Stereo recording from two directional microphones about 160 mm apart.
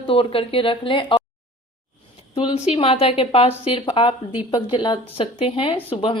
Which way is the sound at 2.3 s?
30° left (ahead or behind).